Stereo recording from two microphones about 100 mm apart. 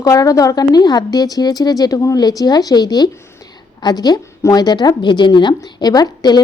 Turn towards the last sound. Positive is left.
turn(degrees=45)  # may be behind; listen again after turning